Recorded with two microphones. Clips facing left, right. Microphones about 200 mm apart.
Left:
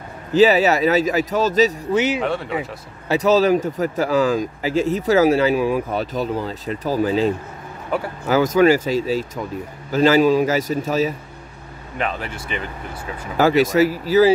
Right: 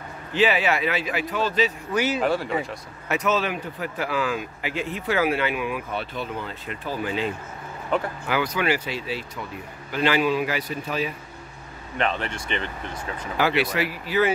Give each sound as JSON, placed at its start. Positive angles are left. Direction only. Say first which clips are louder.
{"t": 0.3, "sound": "speech", "louder": "left 8 dB", "side_deg": 40}
{"t": 2.0, "sound": "speech", "louder": "left 4 dB", "side_deg": 15}
{"t": 2.2, "sound": "speech", "louder": "left 1 dB", "side_deg": 0}
{"t": 3.1, "sound": "speech", "louder": "left 9 dB", "side_deg": 35}
{"t": 7.9, "sound": "speech", "louder": "left 1 dB", "side_deg": 10}
{"t": 8.3, "sound": "speech", "louder": "left 10 dB", "side_deg": 40}
{"t": 12.0, "sound": "speech", "louder": "even", "side_deg": 5}
{"t": 13.4, "sound": "speech", "louder": "left 8 dB", "side_deg": 45}